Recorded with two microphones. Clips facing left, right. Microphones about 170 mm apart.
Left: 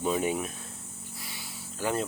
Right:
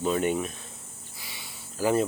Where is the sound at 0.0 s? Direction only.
5° left (ahead or behind).